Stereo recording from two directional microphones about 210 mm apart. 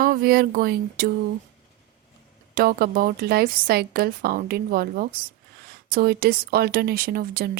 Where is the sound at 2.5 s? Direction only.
45° right (ahead or behind).